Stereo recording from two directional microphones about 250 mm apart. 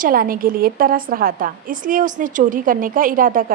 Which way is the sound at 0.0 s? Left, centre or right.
Right.